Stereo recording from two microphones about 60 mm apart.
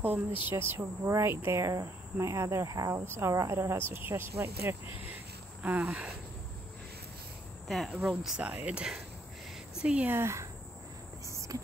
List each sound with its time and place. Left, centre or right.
0.0 s a woman's voice: right
2.7 s speech: right
3.2 s speech: right
5.6 s a sound: right
7.6 s speech: centre
9.8 s speech: centre
10.0 s speech: right
11.2 s cricket: right